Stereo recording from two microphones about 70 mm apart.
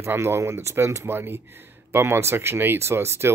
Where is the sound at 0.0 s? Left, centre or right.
Right.